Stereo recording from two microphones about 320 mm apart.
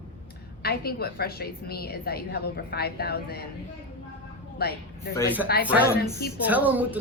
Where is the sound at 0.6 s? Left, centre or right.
Left.